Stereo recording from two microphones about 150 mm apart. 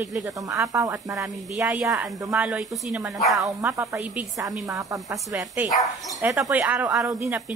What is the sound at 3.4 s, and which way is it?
A woman's voice, 15° right (ahead or behind).